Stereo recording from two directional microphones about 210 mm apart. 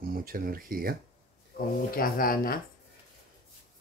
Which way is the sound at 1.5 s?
45° left (ahead or behind).